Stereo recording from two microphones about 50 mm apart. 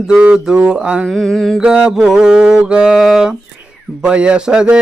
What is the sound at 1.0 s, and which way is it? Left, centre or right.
Mantra, centre.